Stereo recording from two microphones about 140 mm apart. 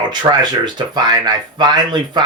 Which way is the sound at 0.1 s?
30° right (ahead or behind).